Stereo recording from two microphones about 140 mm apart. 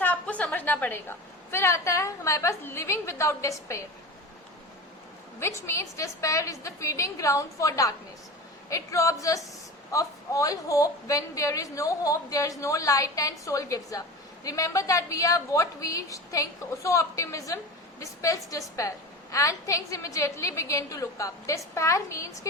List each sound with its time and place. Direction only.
0.0 s a woman's voice: 10° left (ahead or behind)
5.4 s a woman's voice: 20° left (ahead or behind)